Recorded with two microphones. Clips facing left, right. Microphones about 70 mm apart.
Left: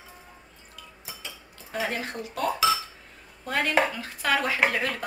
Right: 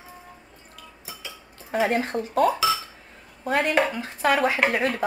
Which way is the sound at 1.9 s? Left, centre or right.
Right.